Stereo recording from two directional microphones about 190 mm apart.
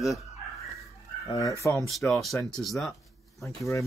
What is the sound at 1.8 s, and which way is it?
A man's voice, centre (ahead or behind).